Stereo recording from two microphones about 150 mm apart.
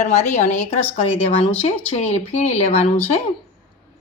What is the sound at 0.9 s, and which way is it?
Speech, 10° left (ahead or behind).